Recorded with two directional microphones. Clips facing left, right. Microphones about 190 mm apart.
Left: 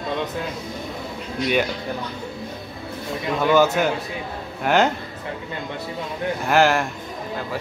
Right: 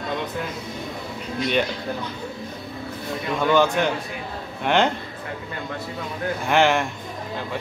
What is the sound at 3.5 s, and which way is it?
A man's voice, 5° left (ahead or behind).